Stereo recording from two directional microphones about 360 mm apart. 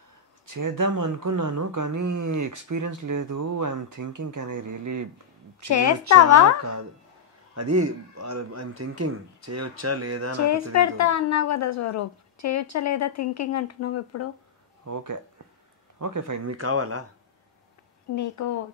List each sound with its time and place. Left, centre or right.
0.5 s speech: right
5.7 s a woman's voice: left
6.6 s speech: right
10.4 s a woman's voice: left
14.8 s speech: right
18.1 s a woman's voice: left